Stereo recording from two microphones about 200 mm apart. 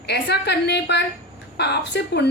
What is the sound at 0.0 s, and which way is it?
A woman's voice, 55° left (ahead or behind).